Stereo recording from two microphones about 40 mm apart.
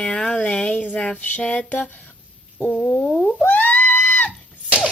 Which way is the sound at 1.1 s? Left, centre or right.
Left.